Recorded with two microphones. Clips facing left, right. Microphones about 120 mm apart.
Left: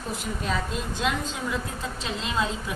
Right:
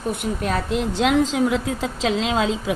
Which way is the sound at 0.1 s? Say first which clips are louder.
Right 6 dB; 60° right (ahead or behind).